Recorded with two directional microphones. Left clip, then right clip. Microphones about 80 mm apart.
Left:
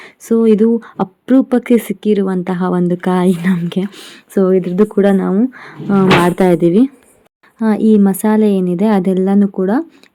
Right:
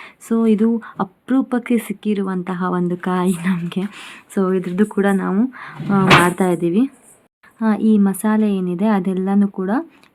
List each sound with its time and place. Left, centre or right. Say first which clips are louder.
0.0 s speech: left 7 dB; left
3.9 s speech: left 1 dB; centre
4.4 s speech: left 7 dB; left
4.9 s a woman's voice: left 5 dB; left
5.5 s speech: left 1 dB; left
6.2 s a woman's voice: left 6 dB; left